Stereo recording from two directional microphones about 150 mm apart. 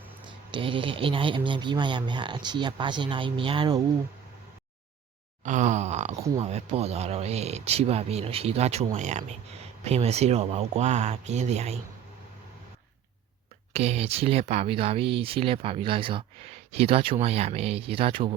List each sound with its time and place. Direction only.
0.3 s speech: 35° right (ahead or behind)
5.4 s speech: 55° right (ahead or behind)
13.7 s speech: 45° right (ahead or behind)